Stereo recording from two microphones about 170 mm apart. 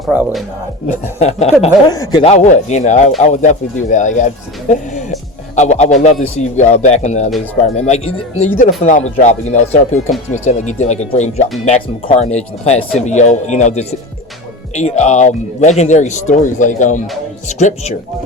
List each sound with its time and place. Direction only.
0.1 s speech: 10° right (ahead or behind)
1.2 s speech: 40° left (ahead or behind)
1.9 s speech: 20° left (ahead or behind)
2.2 s speech: 45° left (ahead or behind)
5.5 s speech: 45° left (ahead or behind)